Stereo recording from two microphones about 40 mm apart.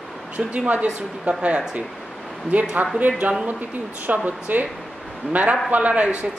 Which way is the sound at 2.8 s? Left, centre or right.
Right.